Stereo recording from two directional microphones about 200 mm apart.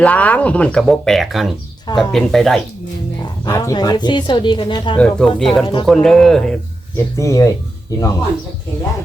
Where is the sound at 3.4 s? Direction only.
20° left (ahead or behind).